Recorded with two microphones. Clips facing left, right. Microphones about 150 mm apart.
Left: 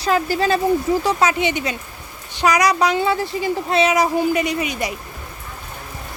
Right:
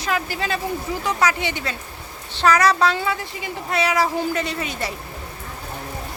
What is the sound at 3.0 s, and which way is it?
Speech, 35° left (ahead or behind).